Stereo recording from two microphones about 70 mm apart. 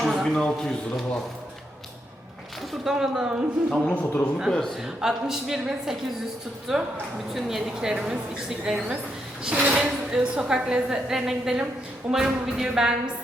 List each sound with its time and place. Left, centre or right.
0.0 s a sound: centre
0.3 s a man's voice: centre
2.8 s a woman's voice: centre
3.9 s a man's voice: left
4.5 s a man's voice: centre
4.8 s a woman's voice: centre